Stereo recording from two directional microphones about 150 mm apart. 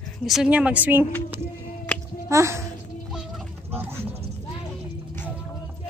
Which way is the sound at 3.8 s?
15° right (ahead or behind).